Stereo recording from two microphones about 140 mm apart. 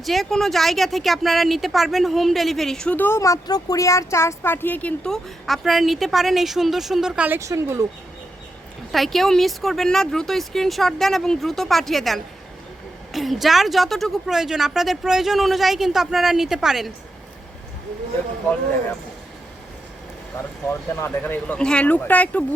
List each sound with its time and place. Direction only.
0.0 s speech: centre (ahead or behind)
7.3 s speech: 20° right (ahead or behind)
8.9 s speech: centre (ahead or behind)
20.7 s speech: 20° left (ahead or behind)